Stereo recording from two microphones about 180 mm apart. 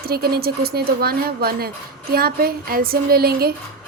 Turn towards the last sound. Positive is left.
turn(degrees=-55)  # may be behind; listen again after turning